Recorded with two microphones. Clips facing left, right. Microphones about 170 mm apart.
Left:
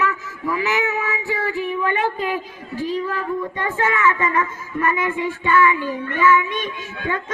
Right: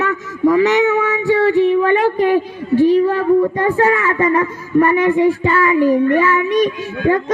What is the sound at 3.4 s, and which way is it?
A child's voice, 35° right (ahead or behind).